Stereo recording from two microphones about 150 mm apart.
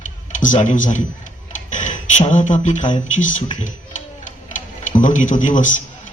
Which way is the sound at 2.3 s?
55° left (ahead or behind).